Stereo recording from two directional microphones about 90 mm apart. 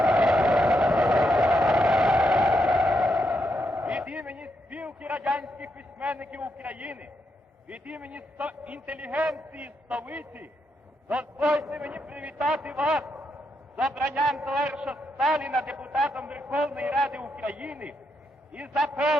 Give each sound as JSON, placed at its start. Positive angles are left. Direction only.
{"t": 0.0, "sound": "music", "side_deg": 0}
{"t": 4.3, "sound": "a sound", "side_deg": -15}
{"t": 5.2, "sound": "a sound", "side_deg": 0}
{"t": 5.5, "sound": "a sound", "side_deg": -15}
{"t": 7.7, "sound": "a man's voice", "side_deg": -15}
{"t": 9.2, "sound": "a man's voice", "side_deg": 0}
{"t": 9.5, "sound": "a man's voice", "side_deg": -15}
{"t": 11.6, "sound": "a man's voice", "side_deg": 0}
{"t": 11.9, "sound": "a man's voice", "side_deg": -15}
{"t": 12.4, "sound": "a man's voice", "side_deg": -5}
{"t": 16.9, "sound": "a man's voice", "side_deg": 0}
{"t": 17.4, "sound": "a man's voice", "side_deg": -15}